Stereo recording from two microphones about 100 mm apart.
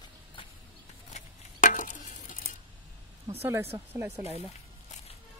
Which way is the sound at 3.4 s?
20° right (ahead or behind).